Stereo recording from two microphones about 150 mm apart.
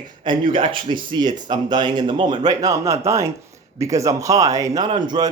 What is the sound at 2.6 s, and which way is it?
Speech, 20° right (ahead or behind).